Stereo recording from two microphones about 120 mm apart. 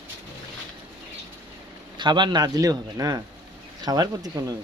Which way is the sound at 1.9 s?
40° right (ahead or behind).